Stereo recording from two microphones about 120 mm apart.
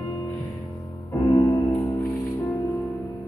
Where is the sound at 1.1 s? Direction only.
25° left (ahead or behind).